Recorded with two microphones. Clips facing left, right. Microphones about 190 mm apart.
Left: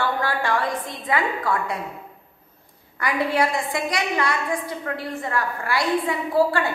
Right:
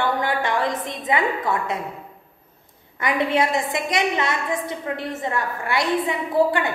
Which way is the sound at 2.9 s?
20° right (ahead or behind).